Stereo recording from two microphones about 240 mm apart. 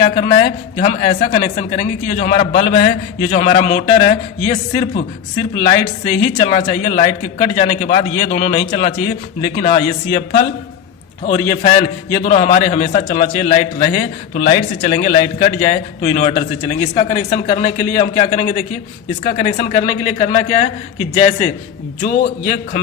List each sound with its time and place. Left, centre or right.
0.0 s a man's voice: left